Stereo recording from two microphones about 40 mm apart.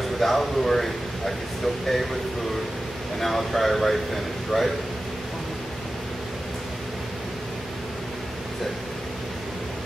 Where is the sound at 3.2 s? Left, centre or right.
Centre.